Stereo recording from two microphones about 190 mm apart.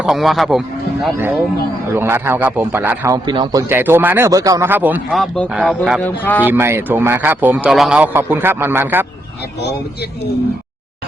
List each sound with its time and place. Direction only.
0.0 s a man's voice: centre (ahead or behind)
3.2 s speech: 25° right (ahead or behind)
3.7 s a man's voice: 10° right (ahead or behind)
6.2 s speech: 10° left (ahead or behind)
6.5 s a man's voice: 15° right (ahead or behind)